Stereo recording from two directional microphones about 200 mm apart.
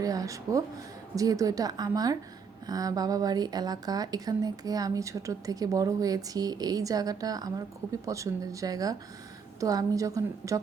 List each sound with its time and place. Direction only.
0.0 s a woman's voice: 15° right (ahead or behind)